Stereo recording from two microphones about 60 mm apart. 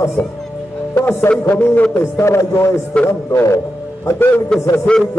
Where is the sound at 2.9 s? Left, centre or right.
Centre.